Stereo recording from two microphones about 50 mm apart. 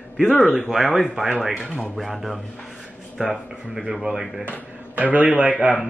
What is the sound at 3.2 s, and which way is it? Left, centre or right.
Speech, centre.